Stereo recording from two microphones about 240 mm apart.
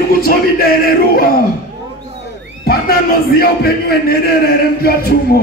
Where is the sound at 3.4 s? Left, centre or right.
Left.